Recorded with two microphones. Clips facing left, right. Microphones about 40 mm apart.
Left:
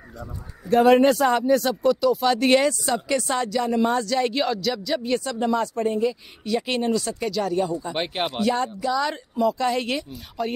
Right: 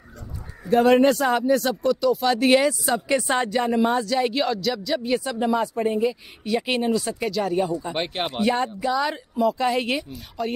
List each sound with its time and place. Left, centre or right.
0.7 s speech: centre
2.9 s speech: centre
3.8 s speech: centre
7.9 s speech: centre
8.3 s speech: right
9.1 s speech: centre
10.4 s speech: centre